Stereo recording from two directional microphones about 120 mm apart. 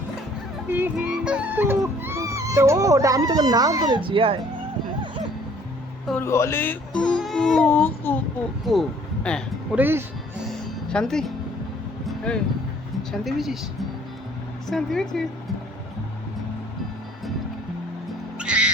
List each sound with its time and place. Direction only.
0.7 s music: 15° right (ahead or behind); by 4.4 s 45° right (ahead or behind)
6.1 s speech: 25° left (ahead or behind)
7.2 s music: 5° left (ahead or behind)
7.7 s speech: 15° left (ahead or behind)
8.6 s speech: centre (ahead or behind)
9.7 s speech: 15° right (ahead or behind)
10.4 s music: 5° left (ahead or behind)
13.0 s speech: centre (ahead or behind)
14.7 s music: 5° left (ahead or behind)
18.3 s music: 10° right (ahead or behind)